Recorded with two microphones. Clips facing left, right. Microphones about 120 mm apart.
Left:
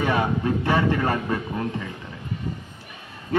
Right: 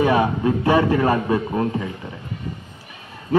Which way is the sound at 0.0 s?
15° right (ahead or behind).